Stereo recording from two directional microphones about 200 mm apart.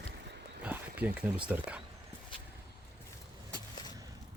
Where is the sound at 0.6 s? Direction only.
5° right (ahead or behind).